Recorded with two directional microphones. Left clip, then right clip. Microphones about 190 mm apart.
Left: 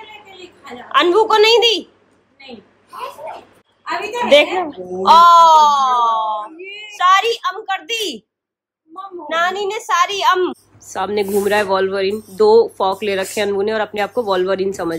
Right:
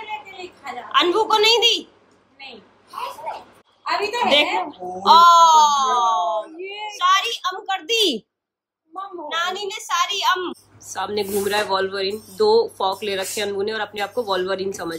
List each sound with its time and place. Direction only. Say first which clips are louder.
0.3 s a woman's voice: right 2 dB; centre (ahead or behind)
3.8 s speech: even; centre (ahead or behind)
6.6 s a sound: right 1 dB; 55° right (ahead or behind)
6.9 s speech: left 5 dB; 5° right (ahead or behind)
7.9 s a woman's voice: right 8 dB; 25° right (ahead or behind)
9.3 s speech: left 7 dB; centre (ahead or behind)